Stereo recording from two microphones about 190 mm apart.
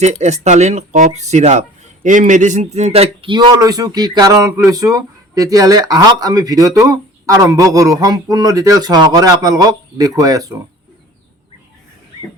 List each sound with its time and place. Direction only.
0.0 s speech: 35° right (ahead or behind); by 10.5 s 20° right (ahead or behind)